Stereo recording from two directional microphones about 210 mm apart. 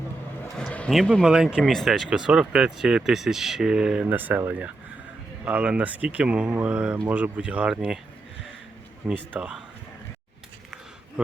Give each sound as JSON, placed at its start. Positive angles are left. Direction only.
{"t": 0.5, "sound": "speech", "side_deg": 5}
{"t": 9.0, "sound": "speech", "side_deg": -5}